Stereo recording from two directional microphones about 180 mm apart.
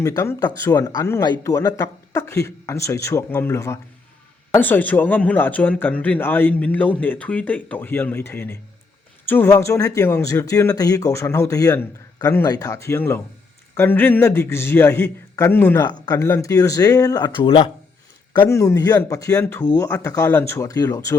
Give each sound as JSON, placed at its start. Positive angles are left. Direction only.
{"t": 0.0, "sound": "speech", "side_deg": 15}
{"t": 18.3, "sound": "speech", "side_deg": 15}